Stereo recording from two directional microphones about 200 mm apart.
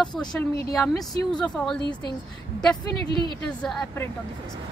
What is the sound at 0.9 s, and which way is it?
Speech, 20° left (ahead or behind).